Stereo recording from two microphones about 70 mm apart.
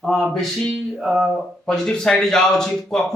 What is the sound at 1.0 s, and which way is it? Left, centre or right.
Speech, centre.